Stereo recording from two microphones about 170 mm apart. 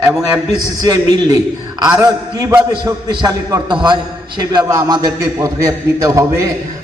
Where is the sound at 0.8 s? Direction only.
20° right (ahead or behind).